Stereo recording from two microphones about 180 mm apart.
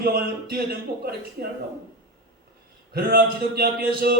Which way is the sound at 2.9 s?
55° right (ahead or behind).